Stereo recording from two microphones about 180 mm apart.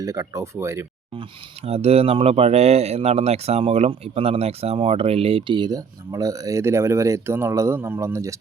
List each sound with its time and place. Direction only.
0.0 s speech: 20° right (ahead or behind)
1.1 s speech: 30° right (ahead or behind); by 8.4 s 15° right (ahead or behind)